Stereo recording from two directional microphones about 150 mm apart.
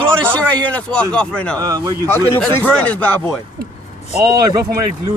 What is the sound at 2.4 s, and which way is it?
Speech, 10° left (ahead or behind).